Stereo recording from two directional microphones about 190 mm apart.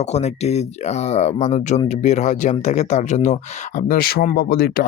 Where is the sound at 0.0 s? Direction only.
35° left (ahead or behind).